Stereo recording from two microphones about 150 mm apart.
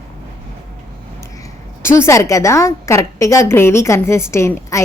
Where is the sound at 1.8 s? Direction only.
15° left (ahead or behind).